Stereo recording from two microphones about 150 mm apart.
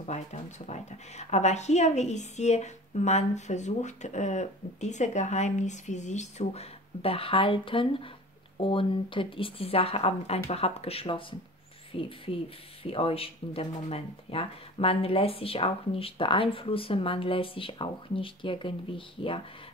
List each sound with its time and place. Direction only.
0.0 s a woman's voice: 50° left (ahead or behind)